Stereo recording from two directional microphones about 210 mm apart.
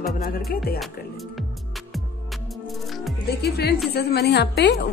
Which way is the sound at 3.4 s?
50° left (ahead or behind).